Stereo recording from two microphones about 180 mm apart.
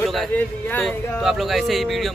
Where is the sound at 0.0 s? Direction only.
Centre (ahead or behind).